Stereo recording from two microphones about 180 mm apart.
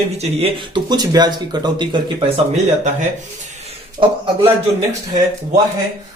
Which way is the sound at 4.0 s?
30° right (ahead or behind).